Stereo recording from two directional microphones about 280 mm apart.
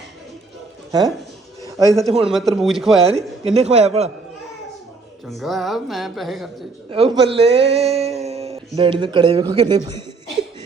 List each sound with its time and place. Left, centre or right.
0.9 s speech: centre
1.6 s a sound: centre
2.0 s a man's voice: right
2.3 s speech: centre
3.0 s a man's voice: right
5.2 s speech: centre
6.9 s speech: centre